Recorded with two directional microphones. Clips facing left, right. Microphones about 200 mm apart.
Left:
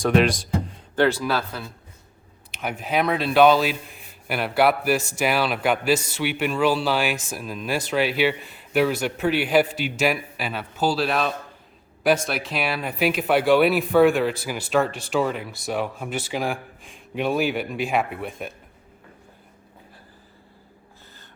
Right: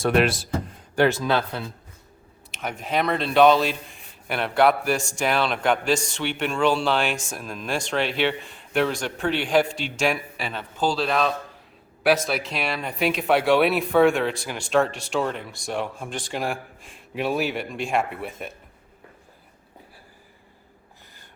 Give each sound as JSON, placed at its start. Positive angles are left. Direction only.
{"t": 0.0, "sound": "speech", "side_deg": 0}
{"t": 0.9, "sound": "speech", "side_deg": -15}
{"t": 2.5, "sound": "speech", "side_deg": 0}